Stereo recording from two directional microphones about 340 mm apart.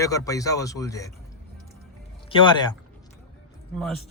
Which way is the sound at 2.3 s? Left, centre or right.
Centre.